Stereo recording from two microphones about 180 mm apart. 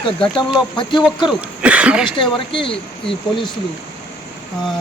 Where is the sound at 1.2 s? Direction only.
5° right (ahead or behind).